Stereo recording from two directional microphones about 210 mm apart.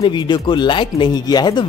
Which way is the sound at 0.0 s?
20° left (ahead or behind).